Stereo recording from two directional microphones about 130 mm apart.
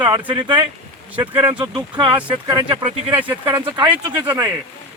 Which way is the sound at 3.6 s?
35° right (ahead or behind).